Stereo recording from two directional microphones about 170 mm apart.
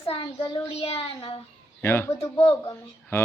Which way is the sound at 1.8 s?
15° left (ahead or behind).